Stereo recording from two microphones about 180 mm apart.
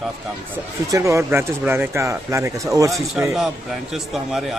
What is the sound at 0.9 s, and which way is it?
Speech, 15° right (ahead or behind).